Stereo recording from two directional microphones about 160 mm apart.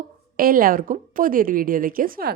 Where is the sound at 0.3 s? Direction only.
65° right (ahead or behind).